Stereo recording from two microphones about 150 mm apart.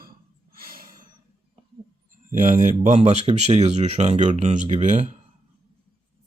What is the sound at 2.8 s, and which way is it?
Speech, 50° right (ahead or behind).